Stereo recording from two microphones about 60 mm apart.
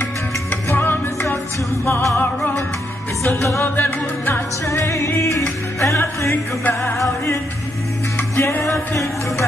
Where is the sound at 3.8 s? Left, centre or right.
Left.